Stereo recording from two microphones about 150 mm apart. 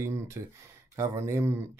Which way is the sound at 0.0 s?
20° right (ahead or behind).